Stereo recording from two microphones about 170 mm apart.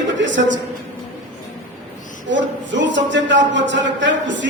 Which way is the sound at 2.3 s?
90° right.